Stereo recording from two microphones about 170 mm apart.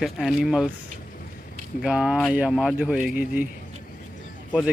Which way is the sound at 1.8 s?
5° right (ahead or behind).